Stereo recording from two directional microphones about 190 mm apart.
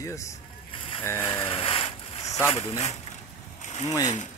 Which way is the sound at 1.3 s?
25° left (ahead or behind).